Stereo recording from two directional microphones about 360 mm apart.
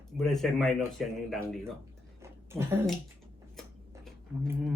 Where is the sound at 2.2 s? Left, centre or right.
Centre.